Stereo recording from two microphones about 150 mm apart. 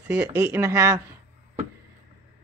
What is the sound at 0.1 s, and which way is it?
Speech, 15° right (ahead or behind).